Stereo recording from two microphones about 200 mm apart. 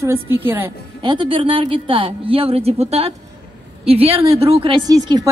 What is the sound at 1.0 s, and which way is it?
A woman's voice, 25° right (ahead or behind).